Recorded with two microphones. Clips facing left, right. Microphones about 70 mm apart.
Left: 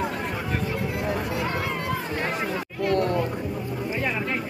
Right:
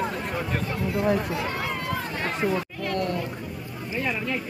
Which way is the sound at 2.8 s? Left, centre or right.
Left.